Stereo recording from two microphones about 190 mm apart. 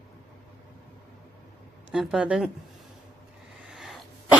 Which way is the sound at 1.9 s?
5° right (ahead or behind).